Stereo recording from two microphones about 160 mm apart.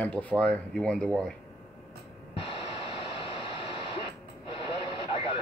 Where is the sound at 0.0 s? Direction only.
10° left (ahead or behind).